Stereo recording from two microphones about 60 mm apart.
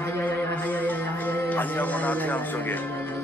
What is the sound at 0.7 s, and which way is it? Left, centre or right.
Speech, left.